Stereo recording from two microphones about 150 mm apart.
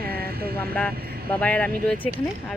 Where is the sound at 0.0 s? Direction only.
90° right.